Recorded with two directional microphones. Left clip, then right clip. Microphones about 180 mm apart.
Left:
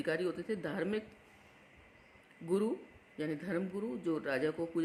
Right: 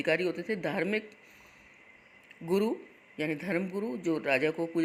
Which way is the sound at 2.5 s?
20° right (ahead or behind).